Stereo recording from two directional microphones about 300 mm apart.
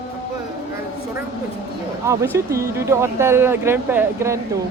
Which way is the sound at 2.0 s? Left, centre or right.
Centre.